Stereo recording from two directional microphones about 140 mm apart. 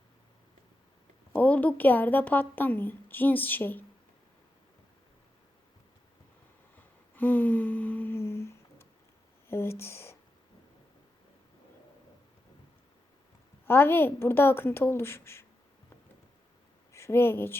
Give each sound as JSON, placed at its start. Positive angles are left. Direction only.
{"t": 1.3, "sound": "speech", "side_deg": 10}
{"t": 6.7, "sound": "a sound", "side_deg": 15}
{"t": 9.5, "sound": "speech", "side_deg": 20}
{"t": 13.7, "sound": "speech", "side_deg": 15}
{"t": 16.9, "sound": "a woman's voice", "side_deg": 20}